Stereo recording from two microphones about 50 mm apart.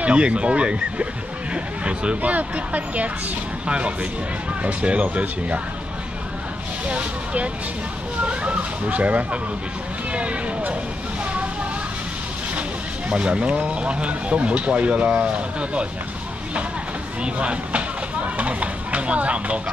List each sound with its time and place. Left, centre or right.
0.0 s speech: right
6.9 s speech: right
13.1 s speech: centre
17.2 s speech: right